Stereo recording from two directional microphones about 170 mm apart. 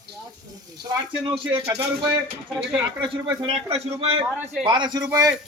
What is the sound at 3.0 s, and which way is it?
A man's voice, 30° right (ahead or behind).